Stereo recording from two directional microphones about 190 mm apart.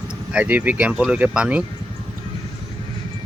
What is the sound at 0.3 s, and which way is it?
Speech, 10° right (ahead or behind).